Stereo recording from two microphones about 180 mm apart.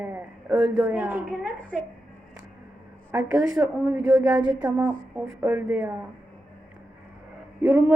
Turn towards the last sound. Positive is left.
turn(degrees=-10)  # may be behind; listen again after turning